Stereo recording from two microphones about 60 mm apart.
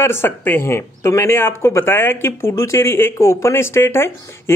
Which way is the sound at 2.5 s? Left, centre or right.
Left.